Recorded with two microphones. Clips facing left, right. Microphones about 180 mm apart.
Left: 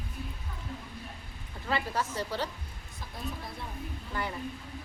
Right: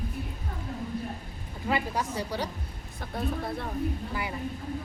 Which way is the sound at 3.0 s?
60° right (ahead or behind).